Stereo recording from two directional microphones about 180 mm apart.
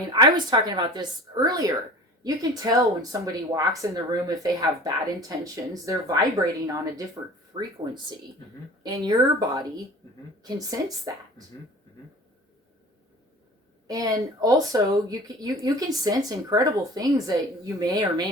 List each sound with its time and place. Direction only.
0.1 s speech: 20° right (ahead or behind)
8.8 s speech: 20° right (ahead or behind)
13.8 s speech: 20° right (ahead or behind)